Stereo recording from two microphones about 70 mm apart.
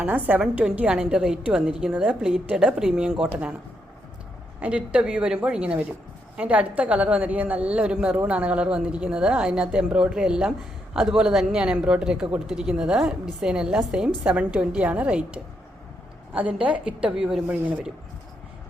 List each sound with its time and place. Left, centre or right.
0.3 s a woman's voice: centre
4.6 s a woman's voice: centre
17.4 s a woman's voice: right